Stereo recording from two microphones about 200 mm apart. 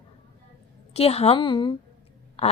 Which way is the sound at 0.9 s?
30° left (ahead or behind).